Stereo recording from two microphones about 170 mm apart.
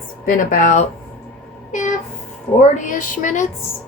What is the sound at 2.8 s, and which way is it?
Speech, 50° left (ahead or behind).